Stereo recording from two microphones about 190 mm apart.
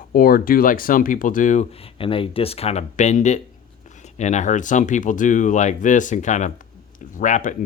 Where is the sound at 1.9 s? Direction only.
30° left (ahead or behind).